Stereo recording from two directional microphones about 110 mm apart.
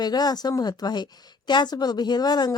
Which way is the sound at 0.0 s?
40° left (ahead or behind).